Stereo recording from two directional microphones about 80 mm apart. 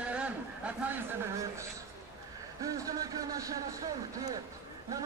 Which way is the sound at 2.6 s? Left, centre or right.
Right.